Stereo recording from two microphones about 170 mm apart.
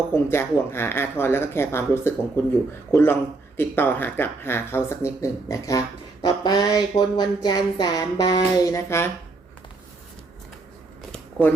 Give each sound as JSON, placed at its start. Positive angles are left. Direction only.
{"t": 0.1, "sound": "speech", "side_deg": 15}
{"t": 5.2, "sound": "a sound", "side_deg": 20}
{"t": 11.1, "sound": "shuffling cards", "side_deg": 10}